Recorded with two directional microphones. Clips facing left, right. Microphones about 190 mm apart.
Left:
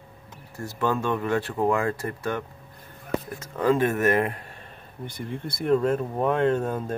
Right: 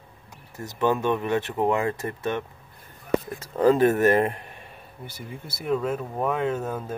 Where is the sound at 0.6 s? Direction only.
20° right (ahead or behind).